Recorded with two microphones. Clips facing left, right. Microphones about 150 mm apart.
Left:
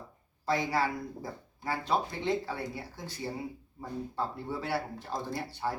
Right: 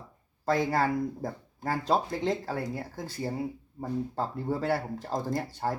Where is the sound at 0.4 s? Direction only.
50° right (ahead or behind).